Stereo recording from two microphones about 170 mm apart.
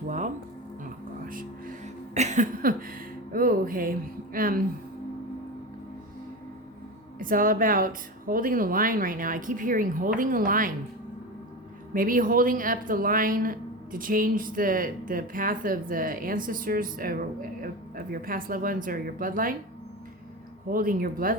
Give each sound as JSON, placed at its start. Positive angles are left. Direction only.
{"t": 1.2, "sound": "music", "side_deg": -55}
{"t": 2.1, "sound": "a sound", "side_deg": -45}
{"t": 3.3, "sound": "speech", "side_deg": -55}
{"t": 7.2, "sound": "speech", "side_deg": -55}
{"t": 11.9, "sound": "speech", "side_deg": -55}
{"t": 20.7, "sound": "speech", "side_deg": -55}